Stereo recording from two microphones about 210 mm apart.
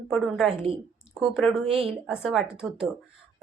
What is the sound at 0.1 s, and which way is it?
Speech, centre (ahead or behind).